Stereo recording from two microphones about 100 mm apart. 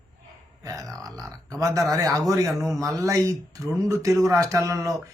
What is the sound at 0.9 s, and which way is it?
Speech, 35° right (ahead or behind).